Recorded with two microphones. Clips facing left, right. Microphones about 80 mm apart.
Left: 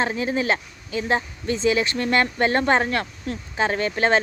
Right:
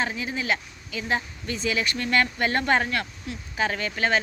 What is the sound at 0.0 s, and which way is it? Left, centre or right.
Speech, left.